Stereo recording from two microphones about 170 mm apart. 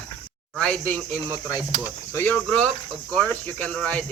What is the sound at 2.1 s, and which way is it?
Speech, 10° left (ahead or behind).